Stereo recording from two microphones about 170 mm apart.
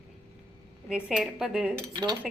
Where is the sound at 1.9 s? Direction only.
25° right (ahead or behind).